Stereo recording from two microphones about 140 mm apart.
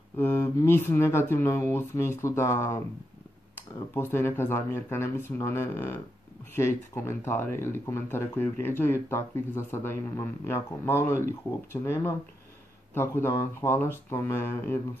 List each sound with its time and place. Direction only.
0.2 s speech: 20° left (ahead or behind)